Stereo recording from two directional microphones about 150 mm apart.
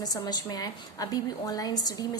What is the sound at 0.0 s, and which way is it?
A woman's voice, 25° left (ahead or behind).